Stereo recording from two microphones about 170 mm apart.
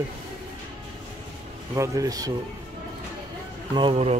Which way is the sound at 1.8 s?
20° right (ahead or behind).